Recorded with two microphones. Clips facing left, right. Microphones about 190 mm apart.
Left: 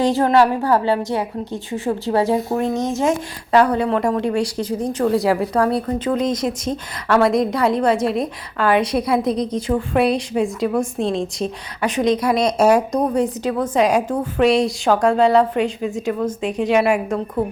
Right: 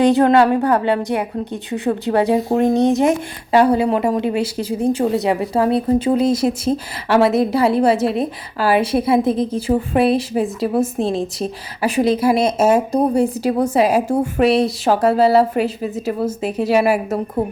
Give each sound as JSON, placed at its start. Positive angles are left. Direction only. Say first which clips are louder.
{"t": 0.0, "sound": "a woman's voice", "louder": "right 3 dB", "side_deg": -60}
{"t": 3.1, "sound": "a woman's voice", "louder": "right 1 dB", "side_deg": -20}
{"t": 5.5, "sound": "speech", "louder": "right 3 dB", "side_deg": -20}
{"t": 6.2, "sound": "a woman's voice", "louder": "right 4 dB", "side_deg": -5}
{"t": 12.6, "sound": "speech", "louder": "even", "side_deg": -25}
{"t": 13.1, "sound": "a woman's voice", "louder": "right 3 dB", "side_deg": -10}